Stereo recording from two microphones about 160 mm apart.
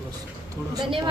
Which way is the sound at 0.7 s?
30° right (ahead or behind).